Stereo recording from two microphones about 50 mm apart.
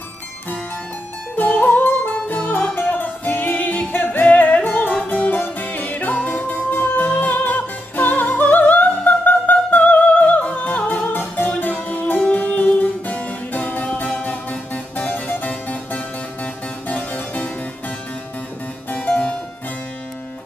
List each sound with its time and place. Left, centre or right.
1.3 s music: left
16.8 s harpsichord: left
18.9 s harpsichord: left